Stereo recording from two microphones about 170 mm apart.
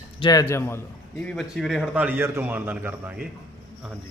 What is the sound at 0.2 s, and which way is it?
Speech, 20° left (ahead or behind).